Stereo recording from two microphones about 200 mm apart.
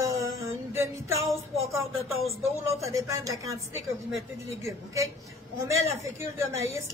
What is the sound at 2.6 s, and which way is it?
A woman's voice, 15° right (ahead or behind).